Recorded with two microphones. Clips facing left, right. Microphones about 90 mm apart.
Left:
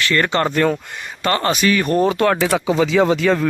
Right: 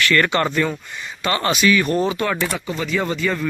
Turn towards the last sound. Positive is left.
turn(degrees=85)